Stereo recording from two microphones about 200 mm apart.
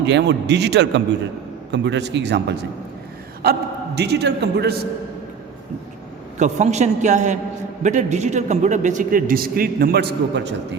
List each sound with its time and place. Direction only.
0.0 s a man's voice: 60° right (ahead or behind)
6.4 s a man's voice: 35° right (ahead or behind); by 10.5 s 60° right (ahead or behind)